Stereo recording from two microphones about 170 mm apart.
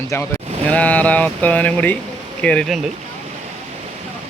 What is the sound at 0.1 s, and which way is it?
A man's voice, 15° left (ahead or behind).